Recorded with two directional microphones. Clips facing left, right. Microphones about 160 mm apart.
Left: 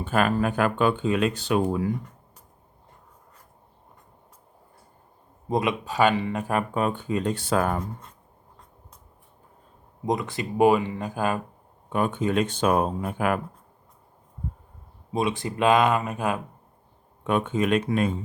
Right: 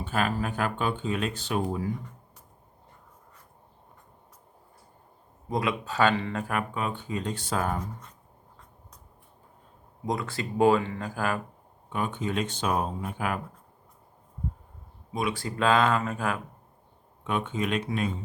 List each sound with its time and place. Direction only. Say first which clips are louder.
0.0 s speech: left 5 dB; 55° left (ahead or behind)
5.5 s speech: left 4 dB; 20° left (ahead or behind)
6.7 s speech: left 6 dB; 50° left (ahead or behind)
10.1 s speech: left 4 dB; 20° left (ahead or behind)
11.9 s speech: left 6 dB; 50° left (ahead or behind)
15.1 s speech: left 4 dB; 25° left (ahead or behind)
17.2 s speech: left 6 dB; 50° left (ahead or behind)